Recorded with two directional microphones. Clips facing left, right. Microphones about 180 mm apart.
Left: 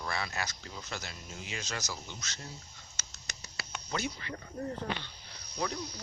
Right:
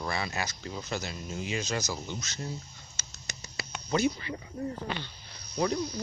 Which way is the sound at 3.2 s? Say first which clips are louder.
Right 5 dB; 15° right (ahead or behind).